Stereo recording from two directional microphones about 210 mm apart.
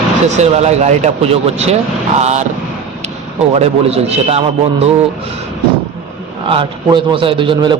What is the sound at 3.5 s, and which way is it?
A man's voice, 30° right (ahead or behind).